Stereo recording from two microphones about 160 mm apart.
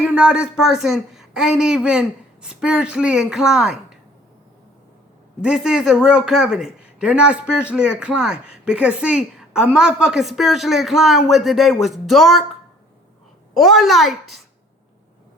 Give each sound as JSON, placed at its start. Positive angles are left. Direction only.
{"t": 0.0, "sound": "speech", "side_deg": -5}
{"t": 5.4, "sound": "speech", "side_deg": -5}
{"t": 13.6, "sound": "speech", "side_deg": 0}